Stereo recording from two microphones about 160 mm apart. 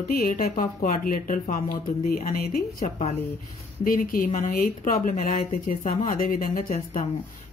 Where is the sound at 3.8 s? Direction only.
60° left (ahead or behind).